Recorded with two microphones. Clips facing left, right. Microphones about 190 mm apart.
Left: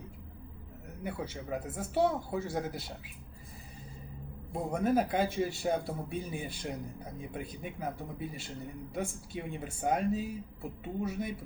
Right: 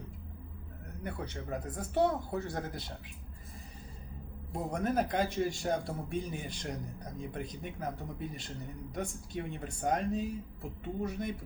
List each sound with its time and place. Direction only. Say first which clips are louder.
1.0 s speech: left 2 dB; 5° left (ahead or behind)
4.7 s speech: left 3 dB; 5° left (ahead or behind)